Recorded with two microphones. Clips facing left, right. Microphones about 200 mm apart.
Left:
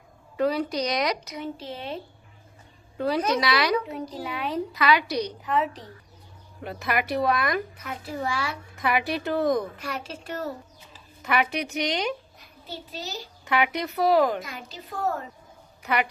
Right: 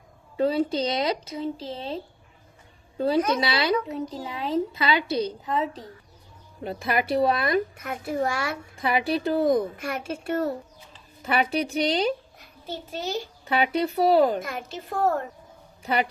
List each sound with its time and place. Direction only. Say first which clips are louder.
0.4 s a woman's voice: right 2 dB; 25° right (ahead or behind)
3.3 s a woman's voice: even; 25° right (ahead or behind)
6.6 s a woman's voice: right 2 dB; 30° right (ahead or behind)
7.8 s a woman's voice: right 5 dB; 50° right (ahead or behind)
8.7 s a woman's voice: right 1 dB; 30° right (ahead or behind)
9.8 s a woman's voice: right 4 dB; 50° right (ahead or behind)
11.2 s a woman's voice: right 2 dB; 30° right (ahead or behind)
12.6 s a woman's voice: right 5 dB; 50° right (ahead or behind)
13.5 s a woman's voice: right 2 dB; 30° right (ahead or behind)
14.4 s a woman's voice: right 6 dB; 50° right (ahead or behind)
15.8 s speech: right 1 dB; 30° right (ahead or behind)